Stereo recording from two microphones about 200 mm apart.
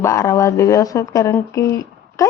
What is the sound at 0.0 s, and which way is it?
Speech, 15° left (ahead or behind).